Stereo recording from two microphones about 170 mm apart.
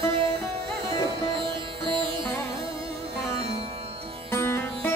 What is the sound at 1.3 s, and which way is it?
Sitar, 30° right (ahead or behind).